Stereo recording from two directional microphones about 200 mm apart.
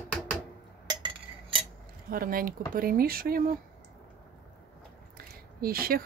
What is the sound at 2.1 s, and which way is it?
Speech, 45° right (ahead or behind).